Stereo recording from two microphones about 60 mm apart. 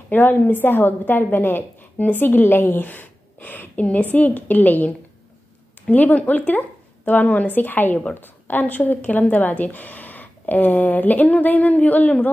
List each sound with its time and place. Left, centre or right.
0.1 s a woman's voice: left